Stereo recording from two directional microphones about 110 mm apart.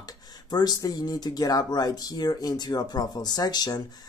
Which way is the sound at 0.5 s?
35° left (ahead or behind).